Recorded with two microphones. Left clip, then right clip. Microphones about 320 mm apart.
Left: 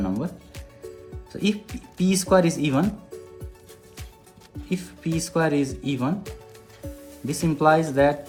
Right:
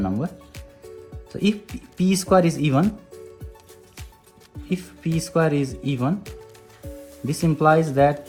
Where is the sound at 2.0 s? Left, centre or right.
Right.